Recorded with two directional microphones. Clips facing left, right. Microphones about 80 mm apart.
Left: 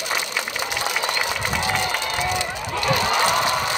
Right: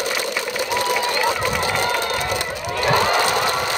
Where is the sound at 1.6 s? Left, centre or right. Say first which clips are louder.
Right 3 dB; right.